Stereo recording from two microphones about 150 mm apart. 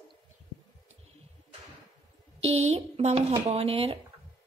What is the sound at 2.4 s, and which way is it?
A woman's voice, 45° right (ahead or behind).